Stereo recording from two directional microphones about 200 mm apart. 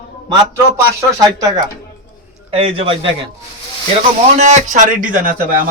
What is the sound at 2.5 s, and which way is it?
Speech, 30° right (ahead or behind).